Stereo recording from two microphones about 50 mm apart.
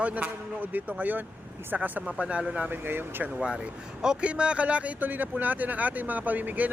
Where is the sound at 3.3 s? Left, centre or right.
Centre.